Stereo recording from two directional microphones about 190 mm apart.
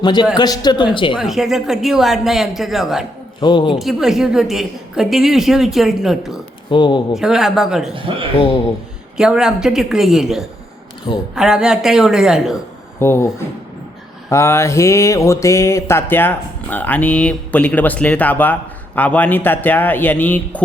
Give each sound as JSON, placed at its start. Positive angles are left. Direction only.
{"t": 0.0, "sound": "speech", "side_deg": 25}
{"t": 1.1, "sound": "a woman's voice", "side_deg": 0}
{"t": 3.4, "sound": "speech", "side_deg": 25}
{"t": 3.8, "sound": "a woman's voice", "side_deg": 0}
{"t": 6.7, "sound": "speech", "side_deg": 25}
{"t": 7.2, "sound": "a woman's voice", "side_deg": 0}
{"t": 9.1, "sound": "a woman's voice", "side_deg": -5}
{"t": 13.0, "sound": "a sound", "side_deg": 15}